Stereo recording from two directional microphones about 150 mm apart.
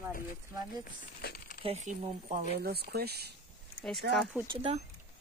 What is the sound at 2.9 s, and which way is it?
Speech, 90° right.